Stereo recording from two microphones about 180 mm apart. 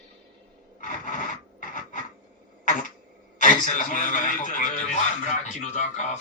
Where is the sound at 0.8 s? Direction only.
45° left (ahead or behind).